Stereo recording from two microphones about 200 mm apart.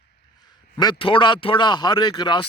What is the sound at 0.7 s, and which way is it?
Speech, 25° left (ahead or behind).